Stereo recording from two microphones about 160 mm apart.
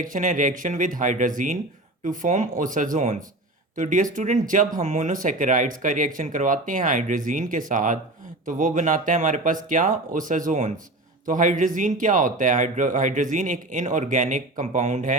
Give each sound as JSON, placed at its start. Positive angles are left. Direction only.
{"t": 0.0, "sound": "speech", "side_deg": -55}